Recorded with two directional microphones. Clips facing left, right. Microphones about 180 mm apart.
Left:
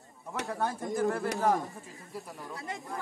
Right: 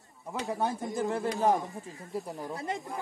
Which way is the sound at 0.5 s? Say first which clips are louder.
Right 1 dB; 20° right (ahead or behind).